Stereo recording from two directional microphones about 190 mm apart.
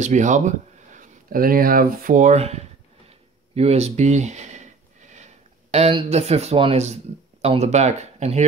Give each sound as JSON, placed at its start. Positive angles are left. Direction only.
{"t": 0.0, "sound": "speech", "side_deg": -40}
{"t": 3.1, "sound": "a sound", "side_deg": -35}
{"t": 7.4, "sound": "speech", "side_deg": -35}